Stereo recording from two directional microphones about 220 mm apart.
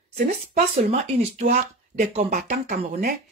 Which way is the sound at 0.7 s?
30° right (ahead or behind).